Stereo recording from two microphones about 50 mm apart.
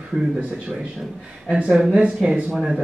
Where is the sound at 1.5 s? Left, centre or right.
Centre.